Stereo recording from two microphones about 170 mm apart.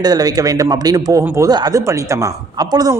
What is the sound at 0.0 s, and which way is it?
Speech, 20° right (ahead or behind).